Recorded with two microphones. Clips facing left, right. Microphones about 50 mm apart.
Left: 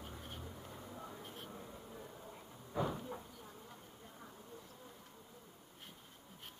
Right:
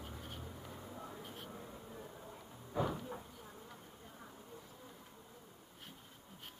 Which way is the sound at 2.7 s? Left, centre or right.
Centre.